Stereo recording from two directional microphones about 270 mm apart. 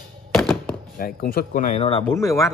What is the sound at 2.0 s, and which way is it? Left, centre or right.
Speech, centre.